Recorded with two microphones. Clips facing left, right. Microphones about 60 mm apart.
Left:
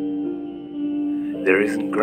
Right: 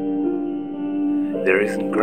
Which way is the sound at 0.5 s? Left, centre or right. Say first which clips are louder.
Right 1 dB; right.